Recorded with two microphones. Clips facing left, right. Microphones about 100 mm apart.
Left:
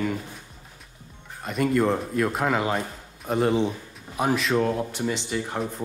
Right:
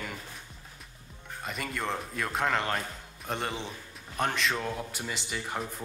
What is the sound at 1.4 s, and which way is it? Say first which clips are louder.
Speech: left 12 dB; centre (ahead or behind).